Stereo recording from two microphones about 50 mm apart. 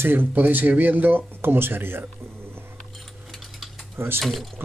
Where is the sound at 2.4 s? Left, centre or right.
Right.